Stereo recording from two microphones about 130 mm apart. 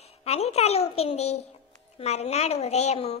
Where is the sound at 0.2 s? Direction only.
55° left (ahead or behind).